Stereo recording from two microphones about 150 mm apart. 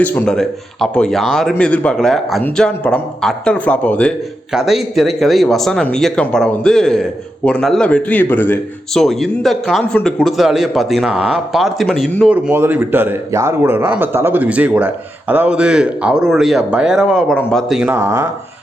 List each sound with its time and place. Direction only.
0.0 s speech: 10° left (ahead or behind)
4.5 s speech: centre (ahead or behind)
8.9 s speech: centre (ahead or behind)
12.3 s speech: 15° right (ahead or behind)
17.9 s speech: 20° right (ahead or behind)